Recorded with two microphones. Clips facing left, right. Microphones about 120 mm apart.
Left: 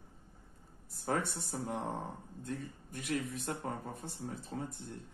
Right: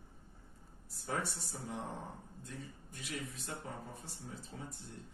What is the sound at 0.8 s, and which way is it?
Speech, 55° left (ahead or behind).